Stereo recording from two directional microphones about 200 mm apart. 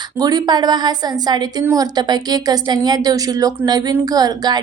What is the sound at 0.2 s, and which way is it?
A woman's voice, 20° right (ahead or behind).